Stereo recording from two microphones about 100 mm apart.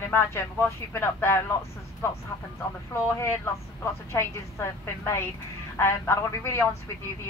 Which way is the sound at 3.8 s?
25° left (ahead or behind).